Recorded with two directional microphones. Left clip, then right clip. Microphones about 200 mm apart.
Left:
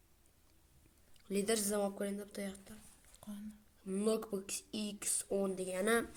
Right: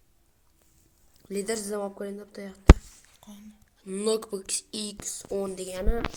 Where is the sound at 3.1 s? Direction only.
30° left (ahead or behind).